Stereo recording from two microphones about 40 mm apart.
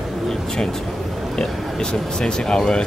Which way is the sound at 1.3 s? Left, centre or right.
Centre.